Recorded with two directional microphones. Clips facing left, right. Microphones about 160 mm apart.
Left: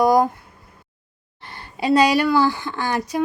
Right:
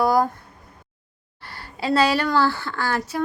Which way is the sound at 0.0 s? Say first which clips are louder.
Left 3 dB; 20° left (ahead or behind).